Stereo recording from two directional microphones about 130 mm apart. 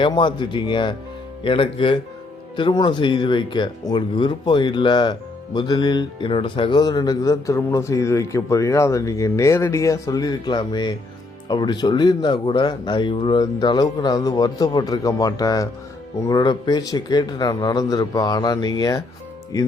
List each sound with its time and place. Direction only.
0.0 s speech: 40° left (ahead or behind)